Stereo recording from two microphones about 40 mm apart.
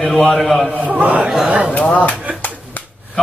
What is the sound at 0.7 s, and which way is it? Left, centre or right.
Speech, right.